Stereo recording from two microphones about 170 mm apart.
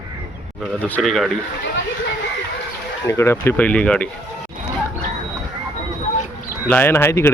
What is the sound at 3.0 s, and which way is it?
Speech, 15° left (ahead or behind).